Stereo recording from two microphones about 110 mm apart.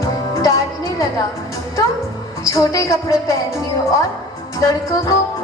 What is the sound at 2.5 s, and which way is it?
Music, 30° left (ahead or behind).